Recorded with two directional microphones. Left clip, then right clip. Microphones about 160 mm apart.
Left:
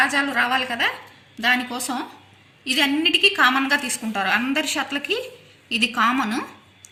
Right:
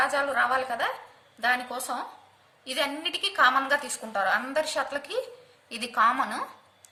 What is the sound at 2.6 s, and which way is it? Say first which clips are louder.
A woman's voice: left 9 dB; 50° right (ahead or behind).